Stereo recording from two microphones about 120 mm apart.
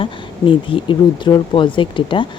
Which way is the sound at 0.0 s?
45° left (ahead or behind).